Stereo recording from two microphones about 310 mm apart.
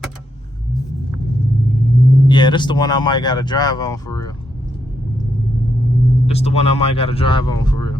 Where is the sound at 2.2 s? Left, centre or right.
Centre.